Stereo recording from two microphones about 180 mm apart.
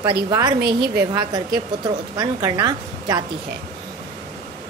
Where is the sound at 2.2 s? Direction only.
20° right (ahead or behind).